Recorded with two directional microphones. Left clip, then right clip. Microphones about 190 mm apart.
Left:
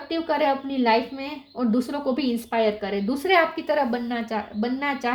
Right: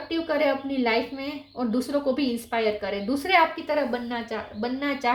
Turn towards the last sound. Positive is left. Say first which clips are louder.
# even
turn(degrees=40)  # may be behind; listen again after turning